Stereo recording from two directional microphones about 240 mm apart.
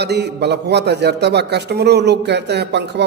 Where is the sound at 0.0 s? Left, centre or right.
Right.